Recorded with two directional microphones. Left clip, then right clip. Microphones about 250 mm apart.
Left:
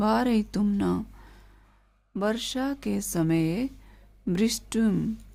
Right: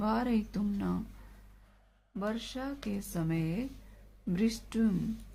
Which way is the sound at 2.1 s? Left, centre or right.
Left.